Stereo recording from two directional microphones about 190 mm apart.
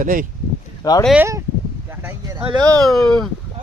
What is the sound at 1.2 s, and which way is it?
Speech, 15° right (ahead or behind).